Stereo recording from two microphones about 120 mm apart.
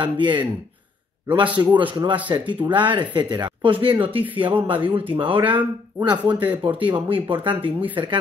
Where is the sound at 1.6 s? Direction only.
30° right (ahead or behind).